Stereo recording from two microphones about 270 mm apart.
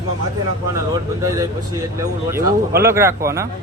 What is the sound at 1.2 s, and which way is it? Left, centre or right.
Speech, centre.